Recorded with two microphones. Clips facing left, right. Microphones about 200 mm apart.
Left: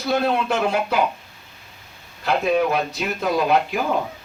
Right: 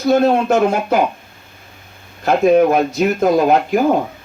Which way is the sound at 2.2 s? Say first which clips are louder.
Right 8 dB; 45° right (ahead or behind).